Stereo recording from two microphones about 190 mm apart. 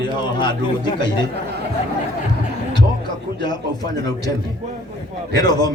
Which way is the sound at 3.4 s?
20° left (ahead or behind).